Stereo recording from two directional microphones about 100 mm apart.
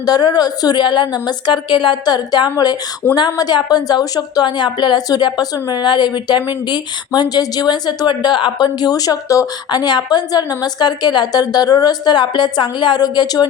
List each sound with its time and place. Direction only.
0.0 s a woman's voice: 40° left (ahead or behind)